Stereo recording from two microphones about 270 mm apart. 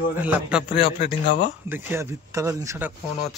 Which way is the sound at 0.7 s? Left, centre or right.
Left.